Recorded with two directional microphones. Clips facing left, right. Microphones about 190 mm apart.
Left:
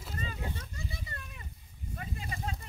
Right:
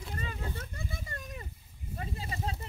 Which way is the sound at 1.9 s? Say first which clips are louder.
Right 2 dB; 30° right (ahead or behind).